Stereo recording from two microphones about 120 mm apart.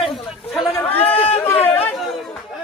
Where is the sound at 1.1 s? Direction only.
55° left (ahead or behind).